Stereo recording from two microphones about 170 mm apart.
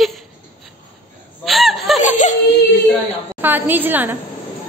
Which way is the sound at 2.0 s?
45° left (ahead or behind).